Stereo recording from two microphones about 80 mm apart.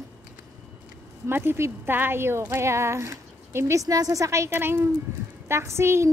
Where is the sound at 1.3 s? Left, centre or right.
Right.